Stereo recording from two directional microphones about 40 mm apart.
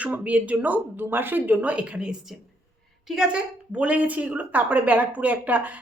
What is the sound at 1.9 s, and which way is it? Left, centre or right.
Speech, right.